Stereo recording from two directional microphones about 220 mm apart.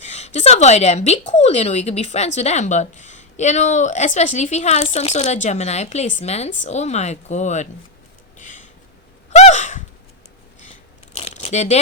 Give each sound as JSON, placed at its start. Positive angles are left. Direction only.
{"t": 0.0, "sound": "a woman's voice", "side_deg": 30}
{"t": 8.4, "sound": "a sound", "side_deg": 35}
{"t": 9.3, "sound": "gasp", "side_deg": 30}
{"t": 11.1, "sound": "crumpling", "side_deg": 30}